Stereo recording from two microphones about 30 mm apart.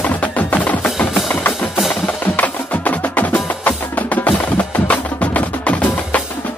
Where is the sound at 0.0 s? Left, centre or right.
Left.